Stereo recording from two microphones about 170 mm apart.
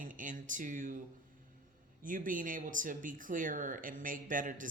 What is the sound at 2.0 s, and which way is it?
Speech, 50° right (ahead or behind).